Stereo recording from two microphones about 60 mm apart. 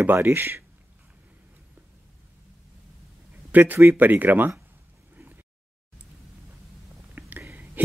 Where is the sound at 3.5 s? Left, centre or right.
Right.